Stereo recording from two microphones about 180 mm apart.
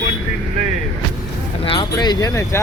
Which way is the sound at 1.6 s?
30° left (ahead or behind).